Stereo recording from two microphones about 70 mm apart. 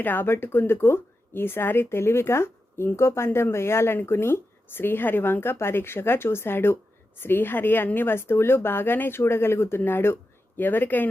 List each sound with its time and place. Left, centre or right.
0.0 s speech: left